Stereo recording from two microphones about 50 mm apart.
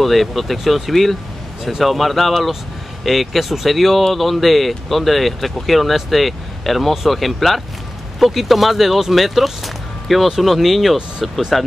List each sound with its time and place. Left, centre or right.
0.0 s speech: centre